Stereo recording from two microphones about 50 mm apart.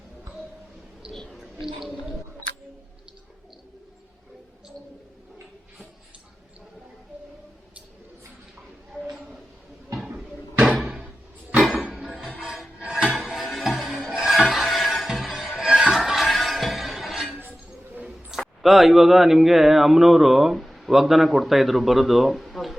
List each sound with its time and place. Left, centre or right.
1.1 s a sound: centre
1.6 s speech: centre
12.0 s music: centre
13.1 s music: centre
18.3 s speech: centre